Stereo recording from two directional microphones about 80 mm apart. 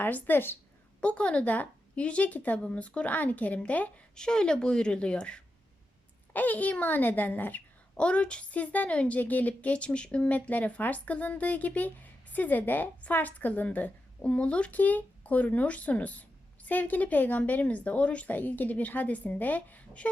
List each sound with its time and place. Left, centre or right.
0.0 s a child's voice: left
1.0 s a child's voice: centre